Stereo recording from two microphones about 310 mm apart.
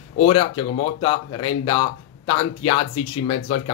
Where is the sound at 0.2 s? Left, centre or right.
Centre.